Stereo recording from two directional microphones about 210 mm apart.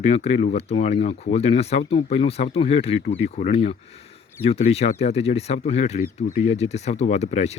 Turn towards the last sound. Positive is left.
turn(degrees=30)  # may be behind; listen again after turning